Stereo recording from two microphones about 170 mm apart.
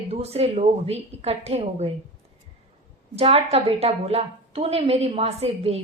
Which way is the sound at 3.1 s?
35° right (ahead or behind).